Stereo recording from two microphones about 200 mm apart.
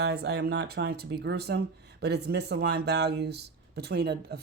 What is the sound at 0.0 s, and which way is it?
Speech, 55° right (ahead or behind).